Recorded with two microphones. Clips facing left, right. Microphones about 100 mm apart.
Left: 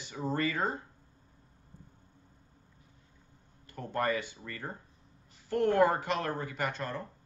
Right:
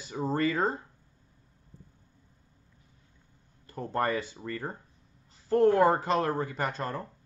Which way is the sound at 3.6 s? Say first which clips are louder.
Right 2 dB; 35° right (ahead or behind).